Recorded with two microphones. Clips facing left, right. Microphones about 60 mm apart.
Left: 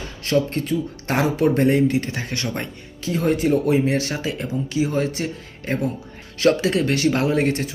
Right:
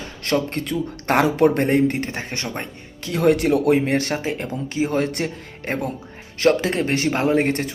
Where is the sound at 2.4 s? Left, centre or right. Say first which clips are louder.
Left 2 dB; centre.